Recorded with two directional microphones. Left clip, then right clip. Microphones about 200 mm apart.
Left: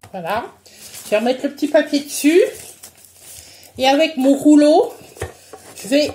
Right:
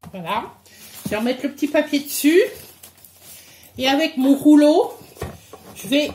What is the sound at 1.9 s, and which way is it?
Speech, 15° right (ahead or behind).